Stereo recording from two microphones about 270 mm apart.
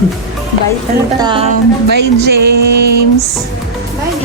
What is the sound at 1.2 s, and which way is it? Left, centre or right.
Speech, centre.